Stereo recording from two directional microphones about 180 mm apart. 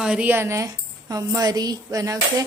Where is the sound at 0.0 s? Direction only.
5° right (ahead or behind).